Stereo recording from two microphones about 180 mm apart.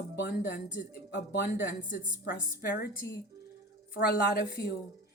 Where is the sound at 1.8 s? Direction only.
50° left (ahead or behind).